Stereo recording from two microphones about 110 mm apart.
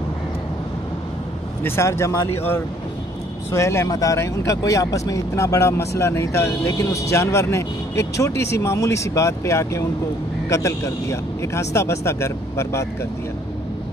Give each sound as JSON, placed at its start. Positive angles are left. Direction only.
{"t": 1.6, "sound": "speech", "side_deg": 25}